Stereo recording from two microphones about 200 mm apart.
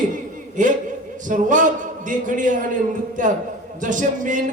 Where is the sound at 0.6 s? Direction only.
40° right (ahead or behind).